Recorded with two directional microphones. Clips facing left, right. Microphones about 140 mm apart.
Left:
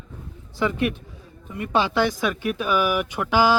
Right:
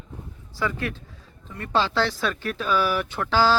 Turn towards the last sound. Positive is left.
turn(degrees=15)  # may be behind; listen again after turning